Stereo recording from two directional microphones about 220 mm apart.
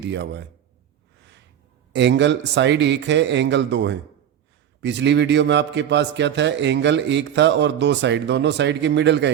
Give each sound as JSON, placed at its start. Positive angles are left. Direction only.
{"t": 0.0, "sound": "a man's voice", "side_deg": -50}
{"t": 1.9, "sound": "a man's voice", "side_deg": -55}